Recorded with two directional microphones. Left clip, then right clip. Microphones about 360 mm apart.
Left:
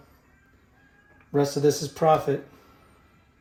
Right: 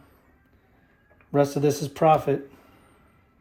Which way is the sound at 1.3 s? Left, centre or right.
Right.